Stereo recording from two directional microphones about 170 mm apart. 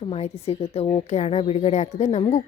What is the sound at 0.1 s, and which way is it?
A woman's voice, 35° left (ahead or behind).